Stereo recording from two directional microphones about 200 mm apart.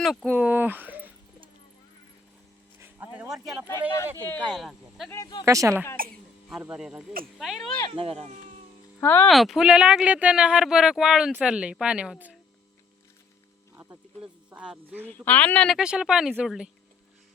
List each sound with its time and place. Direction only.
0.0 s speech: centre (ahead or behind)
2.8 s a sound: 10° right (ahead or behind)
3.7 s speech: 15° left (ahead or behind)
4.5 s speech: centre (ahead or behind)
5.1 s speech: 20° left (ahead or behind)
5.5 s speech: 15° right (ahead or behind)
6.5 s speech: 5° right (ahead or behind)
7.9 s speech: 30° right (ahead or behind)
9.0 s speech: 10° left (ahead or behind)
13.7 s a sound: 10° right (ahead or behind)
15.2 s speech: 10° left (ahead or behind)